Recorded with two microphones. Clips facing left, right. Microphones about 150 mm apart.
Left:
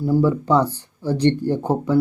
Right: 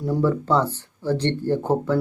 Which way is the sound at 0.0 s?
10° left (ahead or behind).